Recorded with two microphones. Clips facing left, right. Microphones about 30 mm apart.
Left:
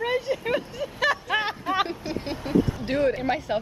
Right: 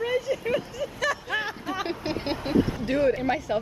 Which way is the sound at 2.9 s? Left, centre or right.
Centre.